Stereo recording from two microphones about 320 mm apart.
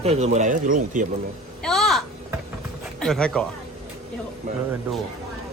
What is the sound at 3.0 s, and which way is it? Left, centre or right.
Speech, centre.